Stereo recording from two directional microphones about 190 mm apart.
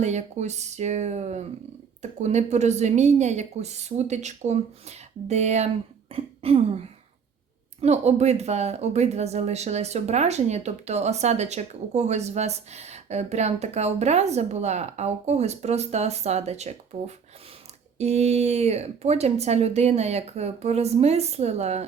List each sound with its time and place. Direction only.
0.0 s speech: 35° right (ahead or behind)